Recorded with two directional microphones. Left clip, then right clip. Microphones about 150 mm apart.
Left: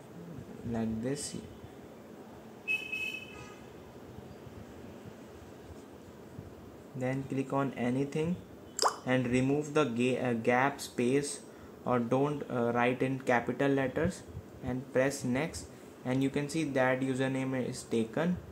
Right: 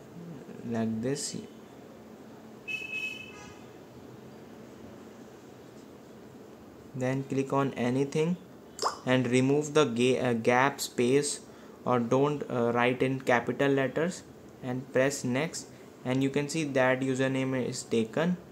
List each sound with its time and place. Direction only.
0.7 s speech: 15° right (ahead or behind)
7.0 s speech: 25° right (ahead or behind)